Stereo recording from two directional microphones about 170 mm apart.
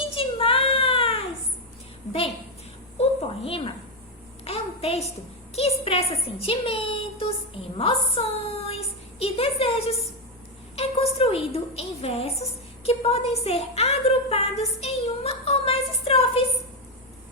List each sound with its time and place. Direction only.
0.2 s child singing: 35° left (ahead or behind)
3.0 s a sound: 35° left (ahead or behind)
5.5 s a woman's voice: 35° left (ahead or behind)